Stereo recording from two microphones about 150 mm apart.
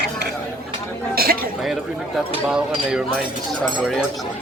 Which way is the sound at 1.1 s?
80° right.